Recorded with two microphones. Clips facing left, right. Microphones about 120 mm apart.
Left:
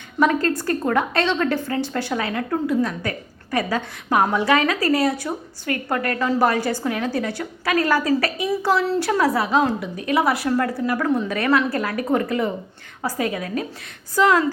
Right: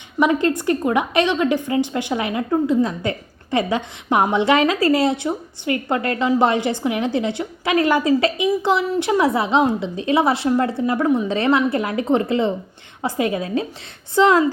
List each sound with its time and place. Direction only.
0.4 s a woman's voice: 20° right (ahead or behind)